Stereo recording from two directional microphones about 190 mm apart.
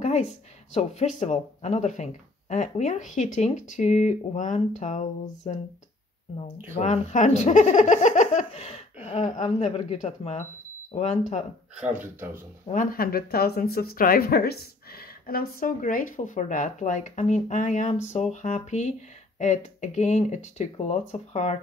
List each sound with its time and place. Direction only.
0.0 s a sound: 40° left (ahead or behind)
0.7 s speech: 35° left (ahead or behind)
6.7 s speech: 35° left (ahead or behind)
12.0 s speech: 10° right (ahead or behind)
12.9 s speech: 50° left (ahead or behind); by 21.5 s 35° left (ahead or behind)